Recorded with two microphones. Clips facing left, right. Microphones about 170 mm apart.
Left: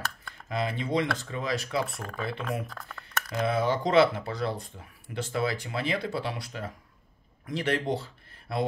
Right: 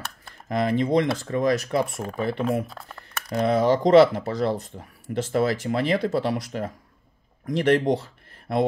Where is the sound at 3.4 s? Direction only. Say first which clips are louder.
Right 7 dB; 40° right (ahead or behind).